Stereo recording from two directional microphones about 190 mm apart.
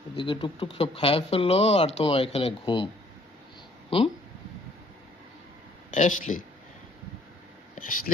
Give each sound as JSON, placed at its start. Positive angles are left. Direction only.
{"t": 0.2, "sound": "speech", "side_deg": 25}
{"t": 5.9, "sound": "speech", "side_deg": 40}
{"t": 7.8, "sound": "speech", "side_deg": 45}